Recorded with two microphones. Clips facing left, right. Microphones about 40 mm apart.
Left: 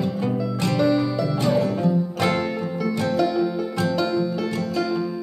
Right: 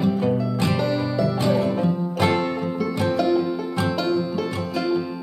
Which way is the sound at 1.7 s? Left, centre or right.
Centre.